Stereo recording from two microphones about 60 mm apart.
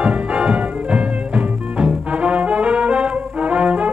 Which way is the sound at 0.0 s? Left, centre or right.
Centre.